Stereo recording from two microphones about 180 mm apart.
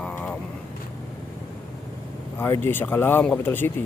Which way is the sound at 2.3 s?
10° left (ahead or behind).